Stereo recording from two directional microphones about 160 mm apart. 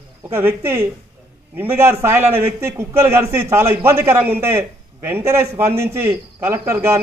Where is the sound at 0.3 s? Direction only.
15° right (ahead or behind).